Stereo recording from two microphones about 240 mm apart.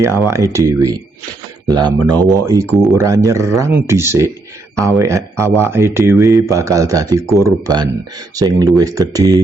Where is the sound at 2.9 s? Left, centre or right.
Centre.